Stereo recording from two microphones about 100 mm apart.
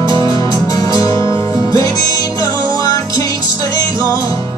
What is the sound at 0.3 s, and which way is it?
Music, 35° left (ahead or behind).